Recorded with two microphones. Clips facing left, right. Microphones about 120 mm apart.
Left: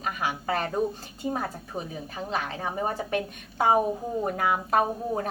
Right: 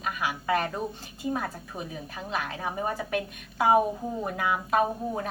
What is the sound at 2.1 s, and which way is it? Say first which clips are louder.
A woman's voice: left 3 dB; 35° left (ahead or behind).